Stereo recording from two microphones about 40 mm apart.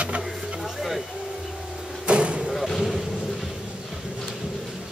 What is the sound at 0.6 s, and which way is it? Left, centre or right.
Speech, centre.